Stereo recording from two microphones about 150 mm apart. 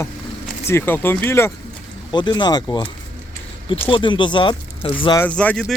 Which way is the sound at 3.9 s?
35° left (ahead or behind).